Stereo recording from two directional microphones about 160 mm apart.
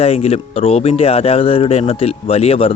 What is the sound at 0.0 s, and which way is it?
Speech, 40° left (ahead or behind).